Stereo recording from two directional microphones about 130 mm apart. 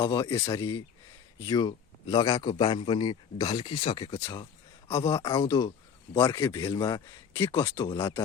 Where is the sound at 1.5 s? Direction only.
30° left (ahead or behind).